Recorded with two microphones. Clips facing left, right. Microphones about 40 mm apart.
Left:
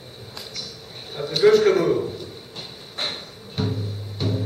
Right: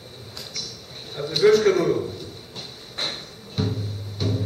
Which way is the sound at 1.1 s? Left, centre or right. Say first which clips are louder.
Left 1 dB; centre.